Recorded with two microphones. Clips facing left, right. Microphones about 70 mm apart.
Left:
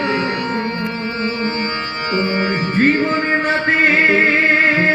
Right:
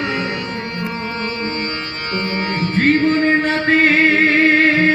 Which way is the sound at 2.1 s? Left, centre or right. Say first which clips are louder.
Left 3 dB; centre.